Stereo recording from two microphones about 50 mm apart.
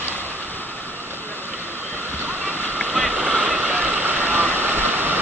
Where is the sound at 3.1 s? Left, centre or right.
Right.